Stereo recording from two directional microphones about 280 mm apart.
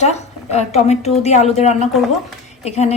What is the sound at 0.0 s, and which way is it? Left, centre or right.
A woman's voice, left.